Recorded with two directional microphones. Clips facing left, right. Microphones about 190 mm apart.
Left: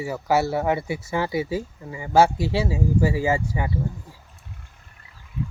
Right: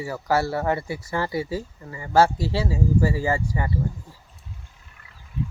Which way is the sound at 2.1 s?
20° left (ahead or behind).